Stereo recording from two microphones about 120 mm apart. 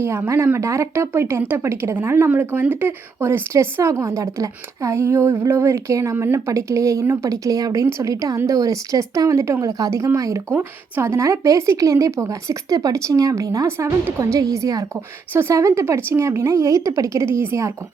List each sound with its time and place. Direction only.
0.0 s speech: 20° right (ahead or behind)